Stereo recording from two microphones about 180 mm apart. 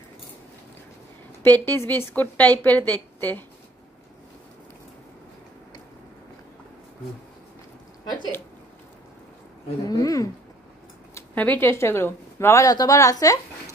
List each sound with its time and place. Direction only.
1.4 s speech: 10° left (ahead or behind)
9.8 s speech: 20° left (ahead or behind)